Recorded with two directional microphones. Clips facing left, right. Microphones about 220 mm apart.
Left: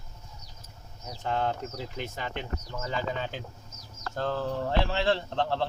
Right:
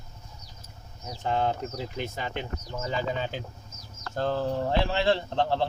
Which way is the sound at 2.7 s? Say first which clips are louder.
Right 3 dB; 30° right (ahead or behind).